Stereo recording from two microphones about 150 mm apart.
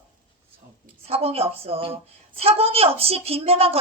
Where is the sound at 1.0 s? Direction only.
40° right (ahead or behind).